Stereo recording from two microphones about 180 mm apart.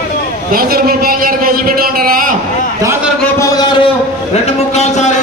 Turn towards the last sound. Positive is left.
turn(degrees=40)  # may be behind; listen again after turning